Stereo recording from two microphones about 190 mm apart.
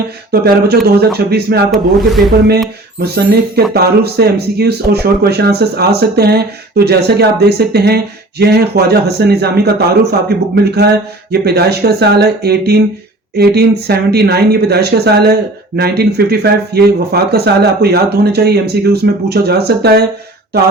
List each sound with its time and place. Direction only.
0.3 s speech: 55° right (ahead or behind)
3.0 s speech: 60° right (ahead or behind)